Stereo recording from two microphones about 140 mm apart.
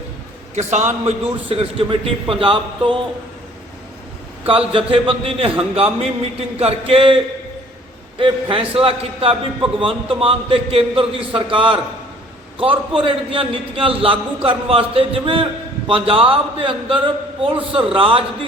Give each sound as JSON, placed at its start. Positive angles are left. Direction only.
{"t": 0.5, "sound": "a man's voice", "side_deg": -55}
{"t": 4.4, "sound": "a man's voice", "side_deg": -40}
{"t": 6.6, "sound": "a sound", "side_deg": -45}
{"t": 8.2, "sound": "a man's voice", "side_deg": -40}